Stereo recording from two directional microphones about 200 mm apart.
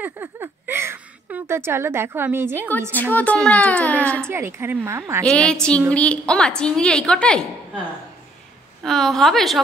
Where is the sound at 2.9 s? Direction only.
10° left (ahead or behind).